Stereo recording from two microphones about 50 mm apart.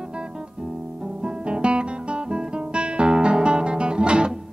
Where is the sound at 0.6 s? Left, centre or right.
Centre.